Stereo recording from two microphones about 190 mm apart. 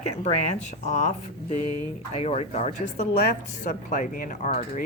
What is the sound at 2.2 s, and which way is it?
Speech, 35° left (ahead or behind).